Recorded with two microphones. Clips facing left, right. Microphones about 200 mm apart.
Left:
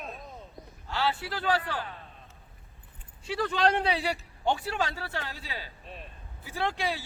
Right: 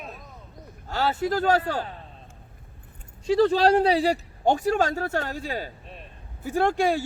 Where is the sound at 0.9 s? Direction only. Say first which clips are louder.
Right 6 dB; 45° right (ahead or behind).